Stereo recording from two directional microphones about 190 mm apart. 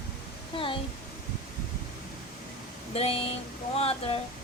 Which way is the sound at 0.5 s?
30° left (ahead or behind).